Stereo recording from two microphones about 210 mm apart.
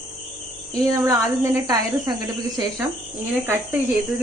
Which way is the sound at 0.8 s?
15° right (ahead or behind).